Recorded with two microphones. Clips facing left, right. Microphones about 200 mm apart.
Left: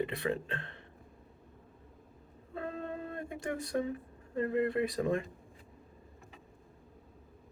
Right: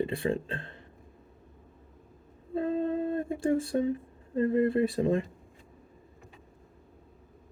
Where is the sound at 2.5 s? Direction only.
30° right (ahead or behind).